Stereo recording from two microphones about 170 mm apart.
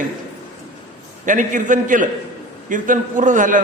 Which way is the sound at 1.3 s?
50° right (ahead or behind).